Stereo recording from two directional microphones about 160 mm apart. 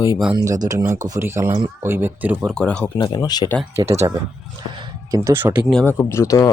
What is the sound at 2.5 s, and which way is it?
Speech, 5° left (ahead or behind).